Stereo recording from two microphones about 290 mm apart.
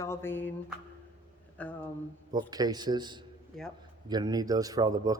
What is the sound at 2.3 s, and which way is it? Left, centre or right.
Speech, centre.